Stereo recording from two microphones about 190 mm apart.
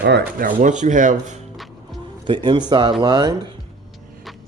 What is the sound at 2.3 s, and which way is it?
A man's voice, 25° right (ahead or behind).